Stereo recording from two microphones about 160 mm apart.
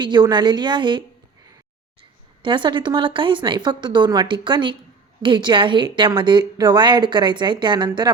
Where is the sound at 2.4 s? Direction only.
30° right (ahead or behind).